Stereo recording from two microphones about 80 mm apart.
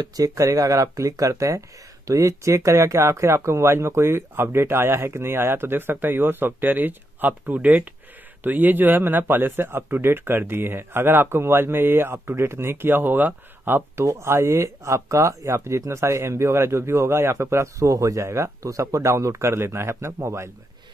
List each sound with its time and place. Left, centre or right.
0.0 s speech: right